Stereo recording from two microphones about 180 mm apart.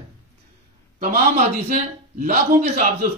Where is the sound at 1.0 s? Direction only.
45° right (ahead or behind).